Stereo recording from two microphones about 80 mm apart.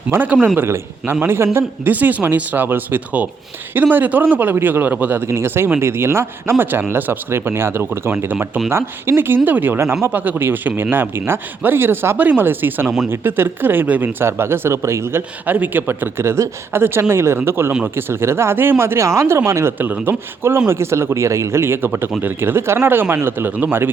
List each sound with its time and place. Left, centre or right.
0.1 s speech: right
10.1 s speech: right
15.4 s speech: right